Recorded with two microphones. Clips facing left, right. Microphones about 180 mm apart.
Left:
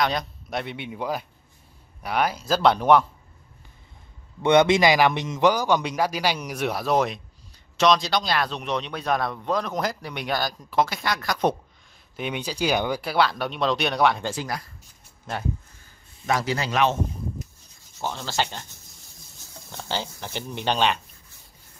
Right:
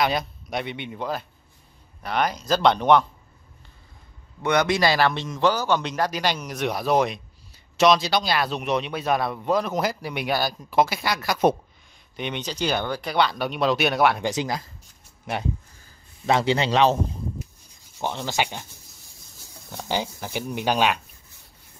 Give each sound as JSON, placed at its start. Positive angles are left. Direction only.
{"t": 0.0, "sound": "a man's voice", "side_deg": -5}
{"t": 4.4, "sound": "a man's voice", "side_deg": 25}
{"t": 12.2, "sound": "speech", "side_deg": 5}
{"t": 14.2, "sound": "a man's voice", "side_deg": -20}
{"t": 16.3, "sound": "a man's voice", "side_deg": -25}
{"t": 18.0, "sound": "speech", "side_deg": -15}
{"t": 19.7, "sound": "speech", "side_deg": -15}